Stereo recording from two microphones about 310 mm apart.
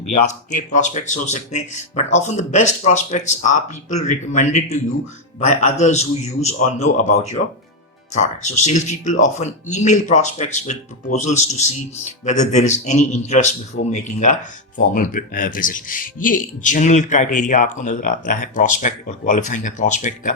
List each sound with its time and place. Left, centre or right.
0.1 s speech: left